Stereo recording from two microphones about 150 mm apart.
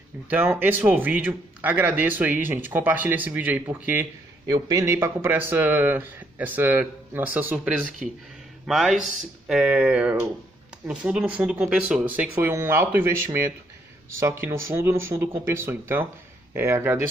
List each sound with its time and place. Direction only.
0.3 s speech: 10° right (ahead or behind)